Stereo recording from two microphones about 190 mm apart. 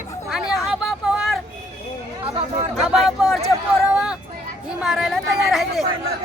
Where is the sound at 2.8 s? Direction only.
Centre (ahead or behind).